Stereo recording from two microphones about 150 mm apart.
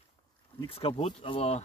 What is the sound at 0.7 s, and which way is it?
Speech, 40° left (ahead or behind).